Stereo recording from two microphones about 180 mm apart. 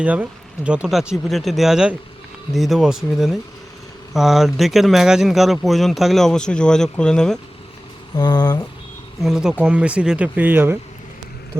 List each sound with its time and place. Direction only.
0.0 s speech: 5° right (ahead or behind)
8.1 s speech: 25° left (ahead or behind)
9.2 s speech: 5° right (ahead or behind)